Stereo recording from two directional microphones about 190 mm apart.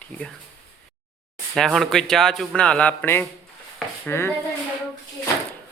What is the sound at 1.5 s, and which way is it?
A man's voice, centre (ahead or behind).